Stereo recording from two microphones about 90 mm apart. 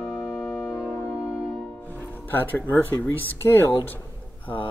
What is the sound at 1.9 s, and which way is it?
Music, 20° left (ahead or behind).